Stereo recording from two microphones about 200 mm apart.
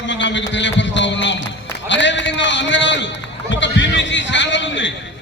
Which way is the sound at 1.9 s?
65° left (ahead or behind).